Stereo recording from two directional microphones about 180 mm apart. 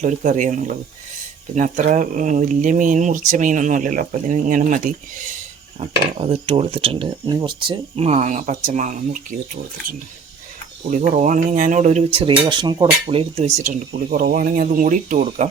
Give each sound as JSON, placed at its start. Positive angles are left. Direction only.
{"t": 0.0, "sound": "speech", "side_deg": -45}
{"t": 5.8, "sound": "speech", "side_deg": -35}
{"t": 10.9, "sound": "speech", "side_deg": -45}